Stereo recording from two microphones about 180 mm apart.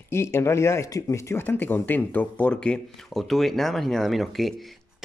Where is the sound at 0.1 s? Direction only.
15° left (ahead or behind).